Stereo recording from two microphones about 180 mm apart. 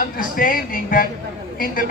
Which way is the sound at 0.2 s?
50° left (ahead or behind).